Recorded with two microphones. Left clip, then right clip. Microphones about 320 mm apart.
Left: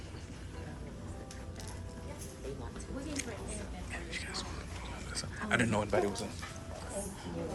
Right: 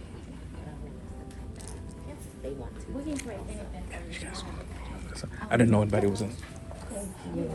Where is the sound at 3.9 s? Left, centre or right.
Centre.